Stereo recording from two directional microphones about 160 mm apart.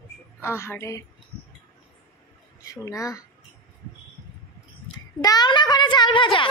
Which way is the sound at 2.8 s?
20° left (ahead or behind).